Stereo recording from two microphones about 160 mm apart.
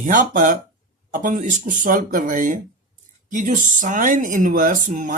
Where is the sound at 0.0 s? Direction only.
55° right (ahead or behind).